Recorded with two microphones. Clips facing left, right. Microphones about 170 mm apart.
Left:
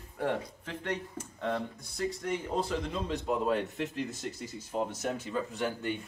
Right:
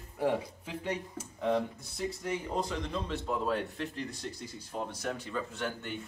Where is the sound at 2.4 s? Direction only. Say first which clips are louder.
Left 2 dB; 5° left (ahead or behind).